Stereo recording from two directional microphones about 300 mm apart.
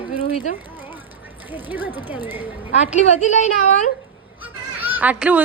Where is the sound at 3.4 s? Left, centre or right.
Left.